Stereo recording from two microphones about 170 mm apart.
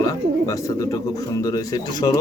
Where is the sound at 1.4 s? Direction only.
20° left (ahead or behind).